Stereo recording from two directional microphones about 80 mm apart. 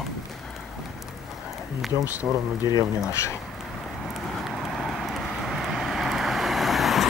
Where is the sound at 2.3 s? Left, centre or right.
Centre.